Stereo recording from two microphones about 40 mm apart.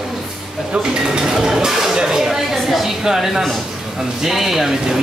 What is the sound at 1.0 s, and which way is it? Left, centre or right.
Speech, centre.